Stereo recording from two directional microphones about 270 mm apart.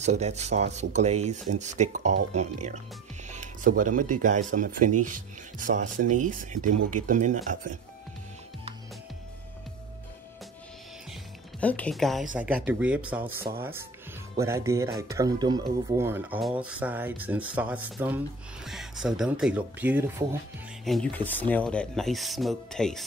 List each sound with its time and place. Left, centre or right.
0.0 s speech: right
5.9 s speech: right
6.1 s speech: right
6.7 s speech: right
7.1 s speech: right
11.6 s speech: centre